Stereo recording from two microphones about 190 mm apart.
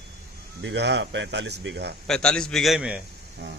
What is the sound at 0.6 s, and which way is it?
Speech, 65° right (ahead or behind).